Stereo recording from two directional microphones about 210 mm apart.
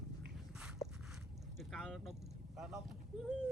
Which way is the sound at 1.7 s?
Centre (ahead or behind).